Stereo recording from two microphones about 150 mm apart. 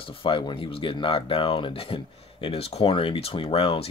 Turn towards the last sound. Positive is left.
turn(degrees=40)  # may be behind; listen again after turning